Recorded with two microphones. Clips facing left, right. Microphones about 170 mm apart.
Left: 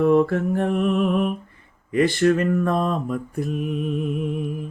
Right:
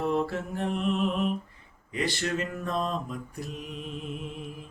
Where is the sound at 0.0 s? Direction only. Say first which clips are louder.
Left 10 dB; 55° left (ahead or behind).